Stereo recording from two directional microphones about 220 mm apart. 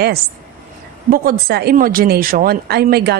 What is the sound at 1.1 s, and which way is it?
A woman's voice, 45° right (ahead or behind).